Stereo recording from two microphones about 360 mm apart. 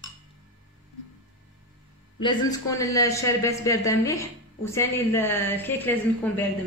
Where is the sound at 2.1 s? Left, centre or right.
Centre.